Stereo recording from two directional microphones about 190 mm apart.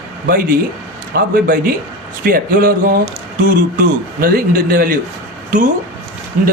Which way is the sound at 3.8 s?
50° right (ahead or behind).